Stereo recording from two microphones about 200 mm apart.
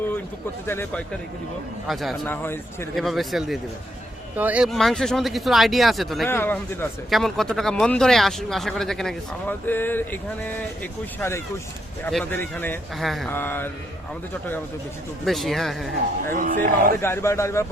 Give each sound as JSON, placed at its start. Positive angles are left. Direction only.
{"t": 0.7, "sound": "a man's voice", "side_deg": 10}
{"t": 1.9, "sound": "a man's voice", "side_deg": 0}
{"t": 2.9, "sound": "speech", "side_deg": 0}
{"t": 6.2, "sound": "a man's voice", "side_deg": 10}
{"t": 15.2, "sound": "speech", "side_deg": 0}
{"t": 16.3, "sound": "speech", "side_deg": -40}
{"t": 17.0, "sound": "a man's voice", "side_deg": 10}